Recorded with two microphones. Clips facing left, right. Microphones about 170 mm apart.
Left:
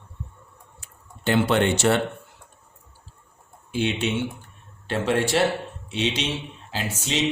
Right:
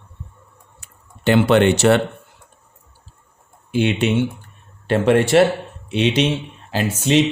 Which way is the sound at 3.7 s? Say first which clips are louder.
Right 7 dB; 65° right (ahead or behind).